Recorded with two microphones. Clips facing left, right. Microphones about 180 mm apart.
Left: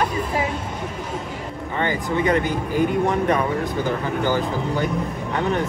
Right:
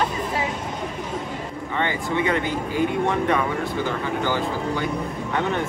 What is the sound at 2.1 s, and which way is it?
Speech, 40° left (ahead or behind).